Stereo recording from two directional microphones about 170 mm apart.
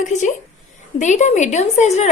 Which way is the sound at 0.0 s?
45° left (ahead or behind).